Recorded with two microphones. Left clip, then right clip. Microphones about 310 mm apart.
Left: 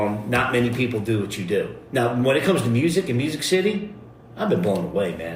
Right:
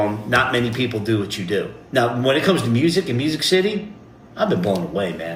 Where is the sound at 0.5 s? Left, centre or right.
Right.